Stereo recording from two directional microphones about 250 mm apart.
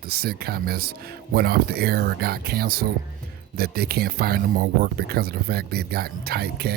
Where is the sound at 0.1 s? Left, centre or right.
Right.